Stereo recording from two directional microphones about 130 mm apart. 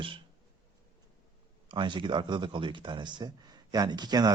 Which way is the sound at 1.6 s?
40° right (ahead or behind).